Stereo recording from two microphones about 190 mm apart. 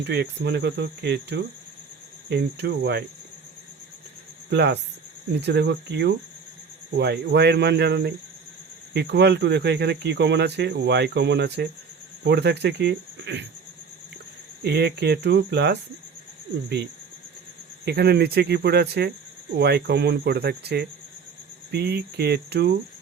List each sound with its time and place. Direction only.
0.0 s speech: 60° right (ahead or behind)
4.4 s speech: 65° right (ahead or behind)
14.6 s speech: 60° right (ahead or behind)